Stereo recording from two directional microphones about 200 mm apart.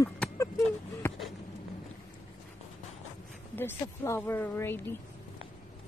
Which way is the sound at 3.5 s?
10° left (ahead or behind).